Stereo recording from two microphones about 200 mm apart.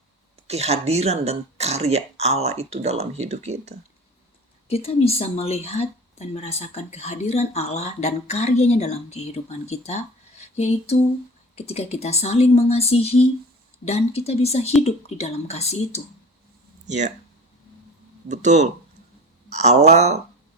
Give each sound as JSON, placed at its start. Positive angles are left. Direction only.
{"t": 0.4, "sound": "speech", "side_deg": -30}
{"t": 4.7, "sound": "speech", "side_deg": 30}
{"t": 16.8, "sound": "speech", "side_deg": -35}
{"t": 18.3, "sound": "speech", "side_deg": -35}